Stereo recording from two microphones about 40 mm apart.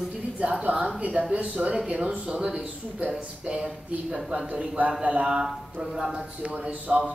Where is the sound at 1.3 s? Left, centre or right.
Right.